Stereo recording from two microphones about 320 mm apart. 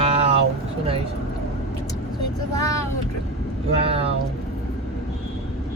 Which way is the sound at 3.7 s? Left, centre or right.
Centre.